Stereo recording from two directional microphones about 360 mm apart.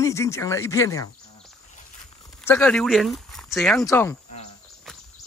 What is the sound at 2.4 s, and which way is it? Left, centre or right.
Speech, centre.